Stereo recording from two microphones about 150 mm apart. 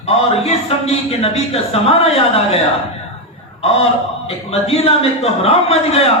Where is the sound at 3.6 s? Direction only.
40° left (ahead or behind).